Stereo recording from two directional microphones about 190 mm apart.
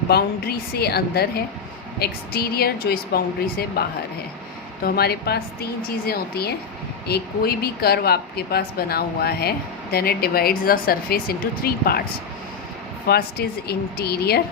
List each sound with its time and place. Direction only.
0.1 s a woman's voice: 55° left (ahead or behind)
13.1 s speech: 55° left (ahead or behind)